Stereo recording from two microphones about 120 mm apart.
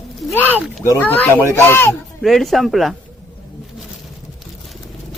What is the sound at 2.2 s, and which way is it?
Speech, centre (ahead or behind).